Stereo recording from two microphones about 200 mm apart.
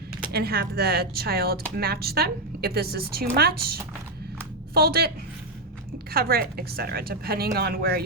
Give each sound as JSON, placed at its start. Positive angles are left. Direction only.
{"t": 0.3, "sound": "speech", "side_deg": -50}